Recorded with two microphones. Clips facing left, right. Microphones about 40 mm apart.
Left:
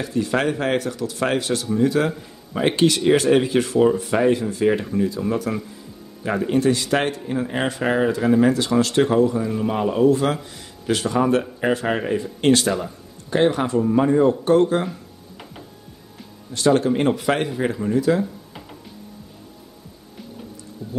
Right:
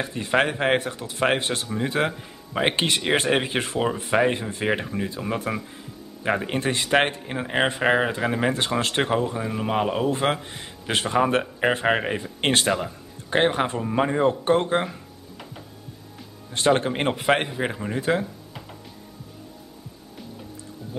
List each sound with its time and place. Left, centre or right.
0.0 s speech: right
16.5 s speech: right
18.2 s a sound: centre